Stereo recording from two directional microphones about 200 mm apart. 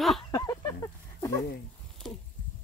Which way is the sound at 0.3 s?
15° left (ahead or behind).